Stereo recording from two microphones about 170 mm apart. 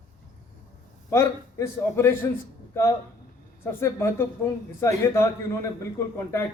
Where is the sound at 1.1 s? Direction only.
15° left (ahead or behind).